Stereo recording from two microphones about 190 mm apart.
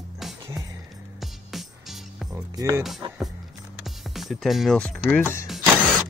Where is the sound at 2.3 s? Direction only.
15° right (ahead or behind).